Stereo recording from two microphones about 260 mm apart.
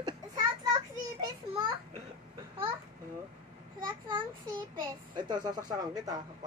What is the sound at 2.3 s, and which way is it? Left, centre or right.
Babbling, right.